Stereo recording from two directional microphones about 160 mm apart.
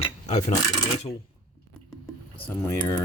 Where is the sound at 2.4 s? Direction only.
15° left (ahead or behind).